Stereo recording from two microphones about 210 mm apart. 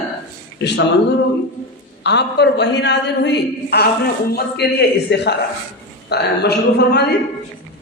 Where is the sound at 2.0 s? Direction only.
55° left (ahead or behind).